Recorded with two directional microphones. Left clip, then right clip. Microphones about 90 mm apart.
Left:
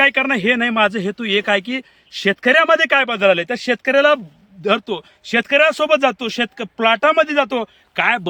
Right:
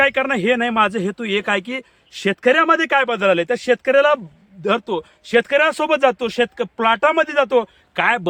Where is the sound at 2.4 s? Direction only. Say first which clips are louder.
Left 1 dB; 45° right (ahead or behind).